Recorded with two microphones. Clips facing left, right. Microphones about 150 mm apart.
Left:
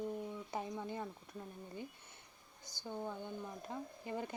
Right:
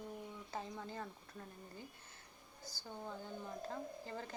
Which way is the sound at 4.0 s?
15° left (ahead or behind).